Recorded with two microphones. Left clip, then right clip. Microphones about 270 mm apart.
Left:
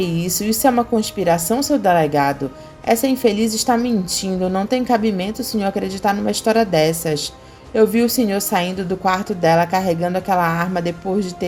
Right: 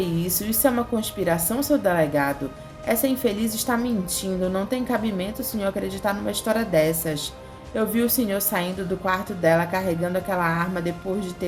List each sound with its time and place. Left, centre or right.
0.2 s a woman's voice: centre